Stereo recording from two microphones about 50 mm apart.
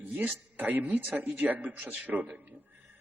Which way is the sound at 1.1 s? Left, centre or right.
Right.